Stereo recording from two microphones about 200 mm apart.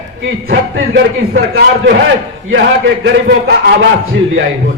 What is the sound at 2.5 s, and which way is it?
Speech, 65° right (ahead or behind).